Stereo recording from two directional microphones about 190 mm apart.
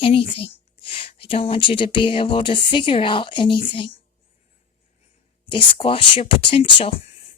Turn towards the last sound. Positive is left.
turn(degrees=30)  # may be behind; listen again after turning